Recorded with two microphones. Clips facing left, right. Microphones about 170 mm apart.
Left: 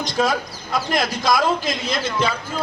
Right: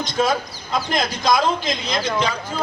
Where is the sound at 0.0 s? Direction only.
Centre (ahead or behind).